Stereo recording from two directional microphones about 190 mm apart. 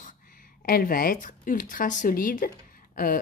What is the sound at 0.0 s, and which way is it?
Speech, 50° left (ahead or behind).